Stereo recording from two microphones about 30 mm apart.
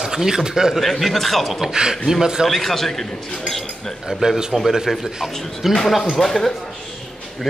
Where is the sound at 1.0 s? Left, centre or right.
Centre.